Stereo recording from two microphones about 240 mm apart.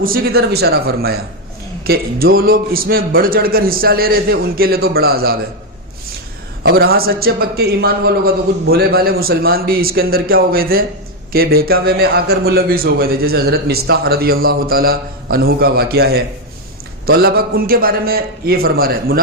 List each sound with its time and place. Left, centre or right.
0.0 s a man's voice: right
6.7 s a man's voice: right